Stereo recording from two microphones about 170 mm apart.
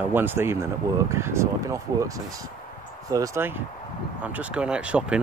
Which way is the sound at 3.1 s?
15° right (ahead or behind).